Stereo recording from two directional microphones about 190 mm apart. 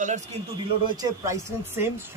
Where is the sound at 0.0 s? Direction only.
40° right (ahead or behind).